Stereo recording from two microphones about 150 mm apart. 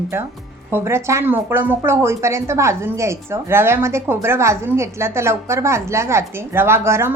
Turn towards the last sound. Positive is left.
turn(degrees=-15)  # may be behind; listen again after turning